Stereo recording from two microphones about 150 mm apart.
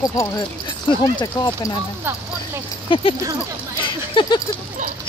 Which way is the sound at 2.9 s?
35° left (ahead or behind).